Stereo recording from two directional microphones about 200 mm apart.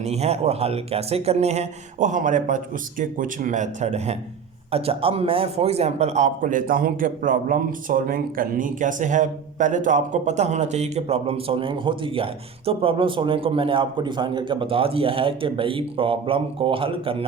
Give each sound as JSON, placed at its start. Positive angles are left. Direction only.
{"t": 0.0, "sound": "a man's voice", "side_deg": -35}